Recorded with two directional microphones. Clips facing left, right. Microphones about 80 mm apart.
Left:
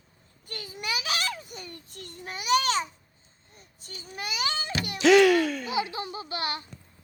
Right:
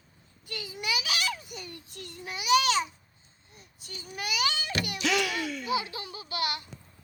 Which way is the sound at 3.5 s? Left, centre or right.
Left.